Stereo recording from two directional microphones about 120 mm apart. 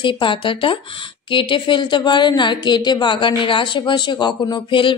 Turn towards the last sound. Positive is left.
turn(degrees=45)  # may be behind; listen again after turning